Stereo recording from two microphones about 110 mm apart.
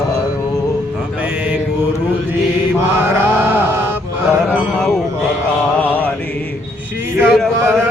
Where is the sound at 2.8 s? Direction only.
20° right (ahead or behind).